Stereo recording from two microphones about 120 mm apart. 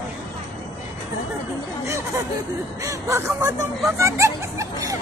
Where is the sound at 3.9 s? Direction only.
25° right (ahead or behind).